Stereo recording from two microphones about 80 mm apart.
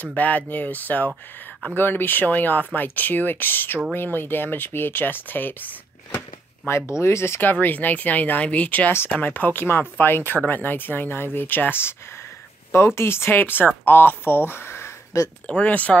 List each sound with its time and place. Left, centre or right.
0.0 s speech: centre
6.7 s speech: left
15.4 s speech: centre